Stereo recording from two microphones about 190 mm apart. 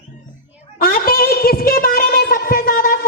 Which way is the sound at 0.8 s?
50° left (ahead or behind).